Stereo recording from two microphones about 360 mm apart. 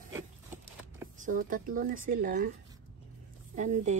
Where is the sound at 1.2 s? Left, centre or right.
Right.